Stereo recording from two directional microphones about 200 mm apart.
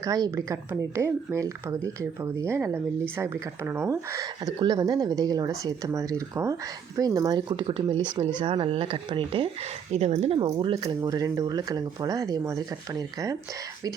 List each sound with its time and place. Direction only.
0.0 s speech: 15° right (ahead or behind)